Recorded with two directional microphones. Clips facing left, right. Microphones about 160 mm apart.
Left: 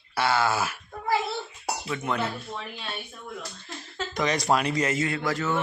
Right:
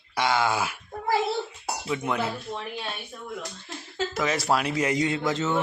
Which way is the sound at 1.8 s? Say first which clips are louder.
Right 2 dB; 10° right (ahead or behind).